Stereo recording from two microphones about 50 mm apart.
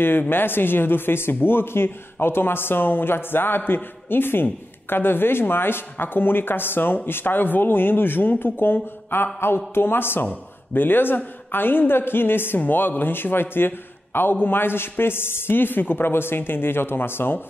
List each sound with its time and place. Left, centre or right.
0.3 s a man's voice: left
10.2 s a man's voice: left